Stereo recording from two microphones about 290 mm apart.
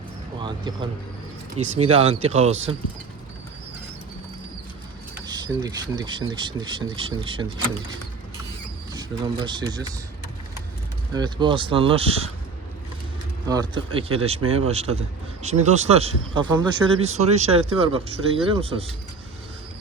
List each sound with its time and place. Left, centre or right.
0.3 s speech: centre
1.9 s speech: right
5.1 s speech: centre
8.9 s speech: centre
11.1 s speech: centre
13.5 s speech: centre